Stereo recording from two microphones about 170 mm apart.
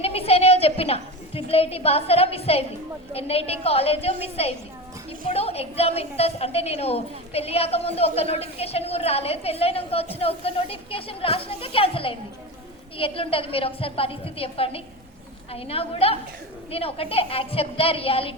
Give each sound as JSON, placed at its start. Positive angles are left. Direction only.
{"t": 0.0, "sound": "a woman's voice", "side_deg": 35}